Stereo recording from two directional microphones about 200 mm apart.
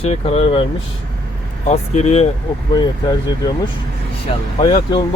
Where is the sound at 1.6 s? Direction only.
35° left (ahead or behind).